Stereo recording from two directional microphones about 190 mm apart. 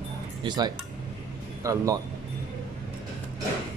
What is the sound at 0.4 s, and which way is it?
A man's voice, 20° right (ahead or behind).